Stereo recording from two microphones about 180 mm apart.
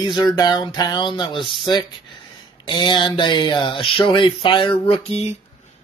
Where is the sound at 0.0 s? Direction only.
25° left (ahead or behind).